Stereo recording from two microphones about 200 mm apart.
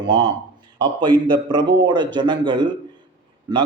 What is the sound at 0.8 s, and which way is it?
A man's voice, 25° right (ahead or behind).